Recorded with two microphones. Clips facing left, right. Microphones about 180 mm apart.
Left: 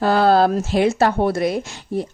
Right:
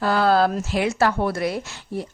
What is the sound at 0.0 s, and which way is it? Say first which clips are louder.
Speech: left 4 dB; 30° left (ahead or behind).